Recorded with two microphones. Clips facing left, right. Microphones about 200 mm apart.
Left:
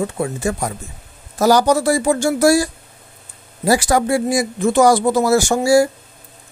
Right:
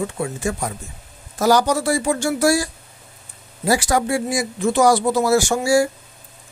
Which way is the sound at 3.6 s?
45° left (ahead or behind).